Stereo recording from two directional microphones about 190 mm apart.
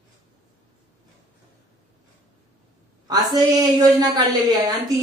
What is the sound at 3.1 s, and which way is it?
Speech, 20° right (ahead or behind).